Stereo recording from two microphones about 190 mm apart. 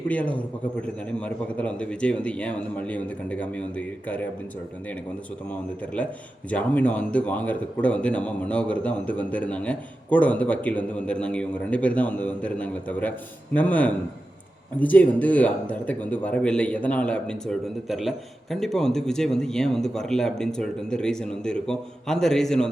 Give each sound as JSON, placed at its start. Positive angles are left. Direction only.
{"t": 0.1, "sound": "a man's voice", "side_deg": 5}
{"t": 5.5, "sound": "a man's voice", "side_deg": 5}